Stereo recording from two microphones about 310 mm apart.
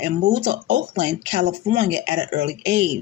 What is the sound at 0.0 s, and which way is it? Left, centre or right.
Speech, right.